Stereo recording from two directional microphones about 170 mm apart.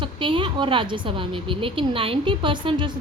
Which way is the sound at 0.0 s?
30° right (ahead or behind).